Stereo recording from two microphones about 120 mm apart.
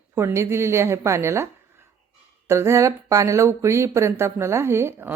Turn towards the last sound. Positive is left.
turn(degrees=-20)  # may be behind; listen again after turning